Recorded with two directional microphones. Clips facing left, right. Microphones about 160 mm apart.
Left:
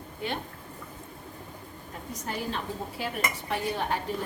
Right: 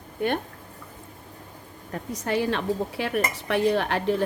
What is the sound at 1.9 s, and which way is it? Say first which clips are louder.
A woman's voice: right 9 dB; 80° right.